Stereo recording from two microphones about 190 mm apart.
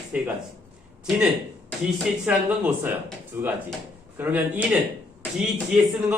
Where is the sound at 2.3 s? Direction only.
10° right (ahead or behind).